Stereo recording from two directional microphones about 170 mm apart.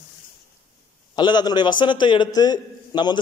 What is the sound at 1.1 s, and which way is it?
A man's voice, 25° left (ahead or behind).